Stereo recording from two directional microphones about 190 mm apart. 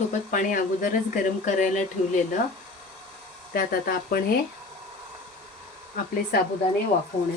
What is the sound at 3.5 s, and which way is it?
Speech, 45° left (ahead or behind).